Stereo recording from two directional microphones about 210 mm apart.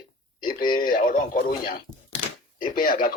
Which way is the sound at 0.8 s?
40° left (ahead or behind).